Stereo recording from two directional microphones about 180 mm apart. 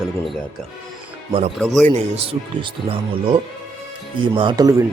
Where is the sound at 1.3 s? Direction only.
30° right (ahead or behind).